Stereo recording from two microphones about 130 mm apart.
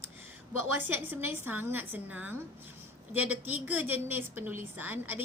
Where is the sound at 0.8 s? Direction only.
15° right (ahead or behind).